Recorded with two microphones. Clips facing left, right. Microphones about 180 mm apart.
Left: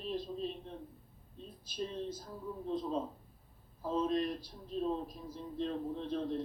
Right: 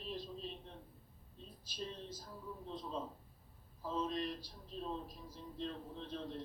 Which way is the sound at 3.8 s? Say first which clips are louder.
Left 6 dB; 50° left (ahead or behind).